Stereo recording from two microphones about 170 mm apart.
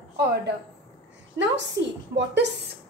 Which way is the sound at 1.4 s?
90° right.